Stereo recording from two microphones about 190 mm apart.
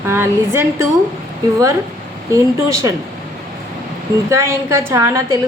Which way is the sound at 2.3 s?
15° right (ahead or behind).